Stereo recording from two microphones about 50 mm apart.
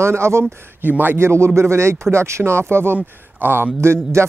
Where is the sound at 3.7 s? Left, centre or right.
Right.